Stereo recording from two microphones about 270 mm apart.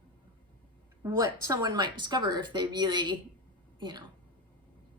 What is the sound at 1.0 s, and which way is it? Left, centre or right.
A woman's voice, centre.